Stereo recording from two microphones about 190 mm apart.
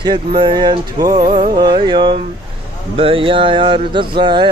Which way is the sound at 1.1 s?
40° right (ahead or behind).